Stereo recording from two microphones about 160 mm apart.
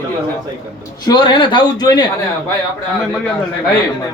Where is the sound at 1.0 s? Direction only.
30° left (ahead or behind).